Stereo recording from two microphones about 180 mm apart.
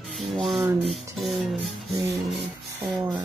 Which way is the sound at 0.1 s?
Centre (ahead or behind).